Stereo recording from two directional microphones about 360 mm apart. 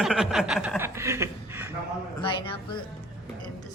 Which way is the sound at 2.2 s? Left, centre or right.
Centre.